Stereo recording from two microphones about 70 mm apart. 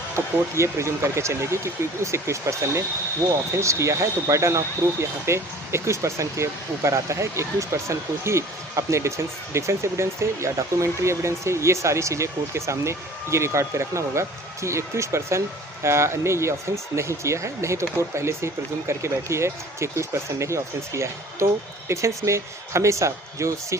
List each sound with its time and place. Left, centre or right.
0.5 s speech: right